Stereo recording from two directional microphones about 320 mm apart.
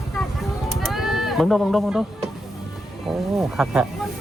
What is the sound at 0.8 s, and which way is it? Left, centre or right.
Sheep, centre.